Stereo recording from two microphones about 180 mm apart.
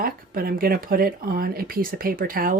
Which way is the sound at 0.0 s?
55° right (ahead or behind).